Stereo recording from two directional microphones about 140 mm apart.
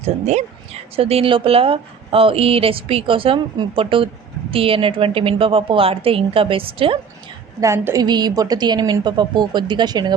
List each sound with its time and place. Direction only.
0.0 s speech: 50° right (ahead or behind)
7.6 s a woman's voice: 20° right (ahead or behind)